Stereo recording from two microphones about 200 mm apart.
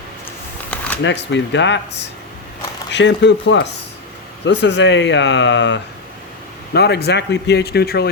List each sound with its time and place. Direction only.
1.0 s speech: 60° left (ahead or behind)